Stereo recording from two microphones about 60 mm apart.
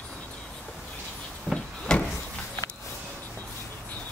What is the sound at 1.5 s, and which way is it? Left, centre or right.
Wood, centre.